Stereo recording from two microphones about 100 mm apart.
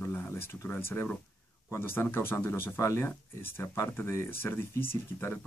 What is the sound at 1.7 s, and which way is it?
A man's voice, 25° left (ahead or behind).